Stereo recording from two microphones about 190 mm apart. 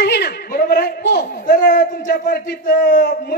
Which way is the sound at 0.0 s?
60° left (ahead or behind).